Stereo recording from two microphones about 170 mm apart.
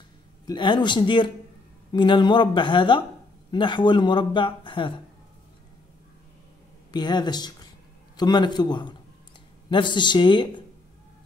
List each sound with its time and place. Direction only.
0.5 s speech: 25° left (ahead or behind)
6.9 s speech: 25° left (ahead or behind)